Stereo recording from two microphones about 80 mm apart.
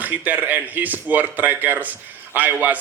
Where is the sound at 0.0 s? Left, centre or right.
Right.